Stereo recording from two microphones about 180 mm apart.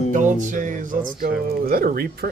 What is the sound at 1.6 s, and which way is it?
Speech, 55° right (ahead or behind).